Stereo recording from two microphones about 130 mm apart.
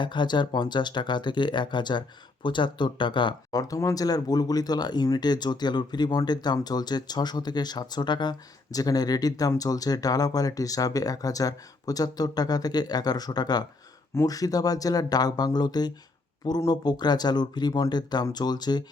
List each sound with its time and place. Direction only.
0.0 s speech: 35° left (ahead or behind)